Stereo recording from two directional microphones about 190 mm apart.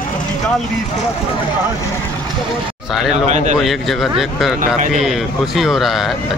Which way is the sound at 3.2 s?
40° right (ahead or behind).